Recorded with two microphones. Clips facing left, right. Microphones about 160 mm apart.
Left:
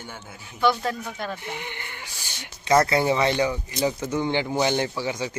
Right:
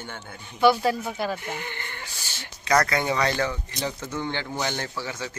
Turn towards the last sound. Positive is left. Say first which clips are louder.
# left 6 dB
turn(degrees=15)  # may be behind; listen again after turning